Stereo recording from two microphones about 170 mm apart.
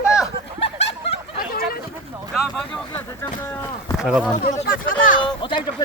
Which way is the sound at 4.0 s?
5° right (ahead or behind).